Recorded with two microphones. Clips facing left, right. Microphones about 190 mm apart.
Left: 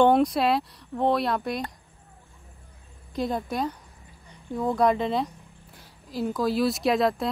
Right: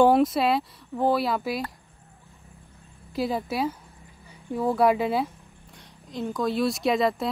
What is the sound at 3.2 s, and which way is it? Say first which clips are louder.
Speech: right 1 dB; 5° right (ahead or behind).